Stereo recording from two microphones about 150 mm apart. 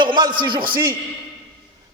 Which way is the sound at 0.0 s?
30° right (ahead or behind).